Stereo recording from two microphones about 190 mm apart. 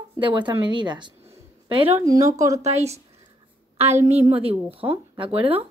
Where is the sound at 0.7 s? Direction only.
25° right (ahead or behind).